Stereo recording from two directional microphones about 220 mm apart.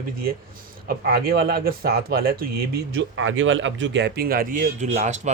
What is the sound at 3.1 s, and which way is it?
Speech, 65° right (ahead or behind).